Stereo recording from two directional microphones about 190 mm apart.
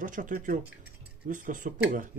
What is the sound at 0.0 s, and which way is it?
Speech, 45° right (ahead or behind).